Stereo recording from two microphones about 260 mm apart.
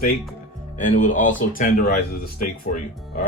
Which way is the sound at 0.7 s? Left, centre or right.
Left.